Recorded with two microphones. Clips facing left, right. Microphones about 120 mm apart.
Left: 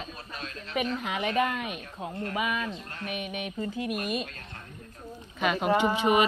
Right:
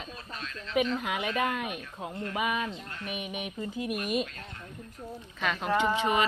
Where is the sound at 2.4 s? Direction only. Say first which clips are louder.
Right 1 dB; 15° right (ahead or behind).